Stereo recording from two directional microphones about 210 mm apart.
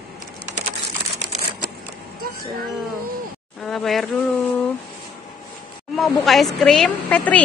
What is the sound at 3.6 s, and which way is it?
Speech, centre (ahead or behind).